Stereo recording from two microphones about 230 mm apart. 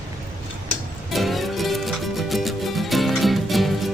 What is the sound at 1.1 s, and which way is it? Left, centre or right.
Music, centre.